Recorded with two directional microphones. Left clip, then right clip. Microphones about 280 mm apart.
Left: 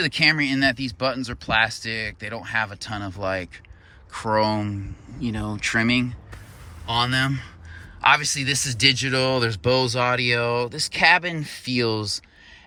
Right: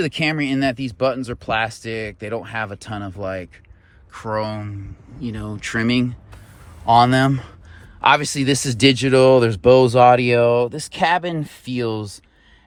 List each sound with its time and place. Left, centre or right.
0.0 s speech: centre
6.8 s speech: centre